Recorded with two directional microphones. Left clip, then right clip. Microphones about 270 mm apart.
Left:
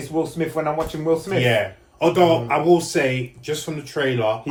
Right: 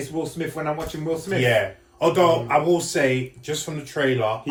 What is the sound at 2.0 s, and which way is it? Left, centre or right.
Speech, centre.